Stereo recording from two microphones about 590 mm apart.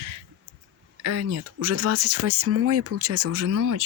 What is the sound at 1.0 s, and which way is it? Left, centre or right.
Speech, right.